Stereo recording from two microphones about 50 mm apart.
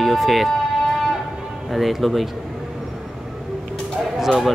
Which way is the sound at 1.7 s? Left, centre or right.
Centre.